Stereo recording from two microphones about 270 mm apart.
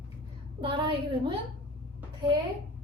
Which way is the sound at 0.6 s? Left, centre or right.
Centre.